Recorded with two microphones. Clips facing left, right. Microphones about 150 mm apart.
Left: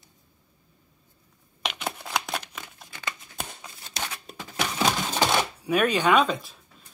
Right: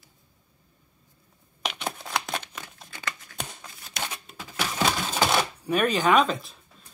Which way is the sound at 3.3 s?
15° left (ahead or behind).